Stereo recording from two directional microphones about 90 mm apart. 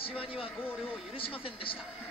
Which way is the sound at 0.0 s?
90° left.